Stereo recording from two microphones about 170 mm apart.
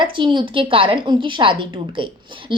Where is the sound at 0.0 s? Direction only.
30° right (ahead or behind).